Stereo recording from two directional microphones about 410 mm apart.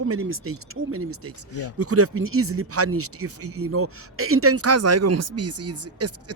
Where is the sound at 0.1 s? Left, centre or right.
Right.